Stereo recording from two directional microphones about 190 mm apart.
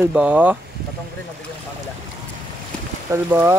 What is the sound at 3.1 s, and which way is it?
Speech, 15° right (ahead or behind).